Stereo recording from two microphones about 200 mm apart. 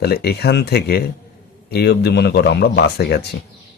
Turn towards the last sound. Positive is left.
turn(degrees=55)  # may be behind; listen again after turning